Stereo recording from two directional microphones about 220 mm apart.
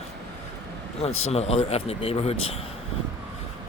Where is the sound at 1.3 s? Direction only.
30° left (ahead or behind).